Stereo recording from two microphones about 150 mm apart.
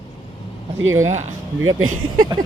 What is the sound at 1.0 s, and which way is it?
Speech, 50° right (ahead or behind).